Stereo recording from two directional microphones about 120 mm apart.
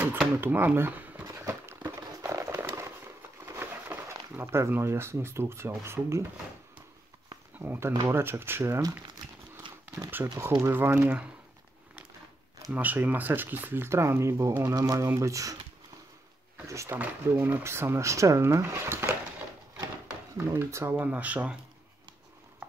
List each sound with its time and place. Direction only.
0.4 s speech: 15° right (ahead or behind)
1.5 s a sound: 20° right (ahead or behind)
3.4 s speech: 20° right (ahead or behind)
7.5 s speech: 15° right (ahead or behind)
9.6 s a sound: 45° right (ahead or behind)
10.1 s speech: 20° right (ahead or behind)
12.7 s speech: 15° right (ahead or behind)
16.6 s speech: 25° right (ahead or behind)
20.3 s speech: 20° right (ahead or behind)